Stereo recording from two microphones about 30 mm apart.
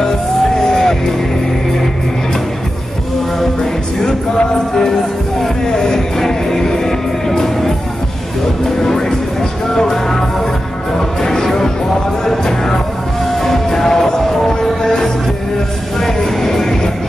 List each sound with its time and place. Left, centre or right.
0.6 s music: centre
4.0 s music: left